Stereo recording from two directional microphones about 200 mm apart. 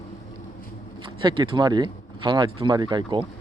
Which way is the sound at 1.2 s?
25° right (ahead or behind).